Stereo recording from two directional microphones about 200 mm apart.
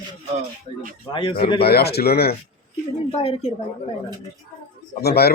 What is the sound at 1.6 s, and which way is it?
Speech, 55° left (ahead or behind).